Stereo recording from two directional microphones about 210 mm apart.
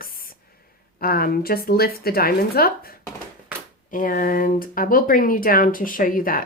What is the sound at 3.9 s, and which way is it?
Speech, 40° left (ahead or behind).